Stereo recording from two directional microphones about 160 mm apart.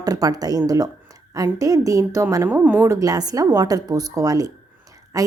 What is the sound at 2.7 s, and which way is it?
A woman's voice, 20° right (ahead or behind).